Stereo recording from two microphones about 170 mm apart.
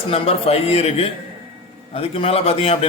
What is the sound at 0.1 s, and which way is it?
A man's voice, 35° left (ahead or behind).